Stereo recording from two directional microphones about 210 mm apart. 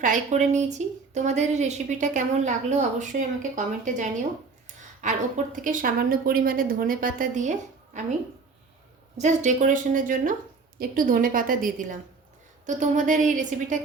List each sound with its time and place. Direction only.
0.0 s a woman's voice: 35° right (ahead or behind)
9.1 s a woman's voice: 35° right (ahead or behind)